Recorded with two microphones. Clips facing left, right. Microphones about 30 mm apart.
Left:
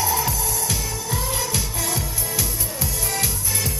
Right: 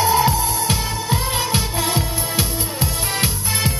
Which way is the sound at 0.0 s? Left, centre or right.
Right.